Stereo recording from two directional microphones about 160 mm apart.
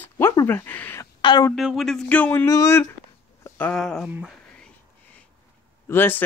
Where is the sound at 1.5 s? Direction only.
Centre (ahead or behind); by 2.9 s 20° left (ahead or behind).